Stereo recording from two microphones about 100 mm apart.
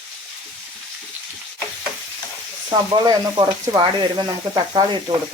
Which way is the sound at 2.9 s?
45° right (ahead or behind).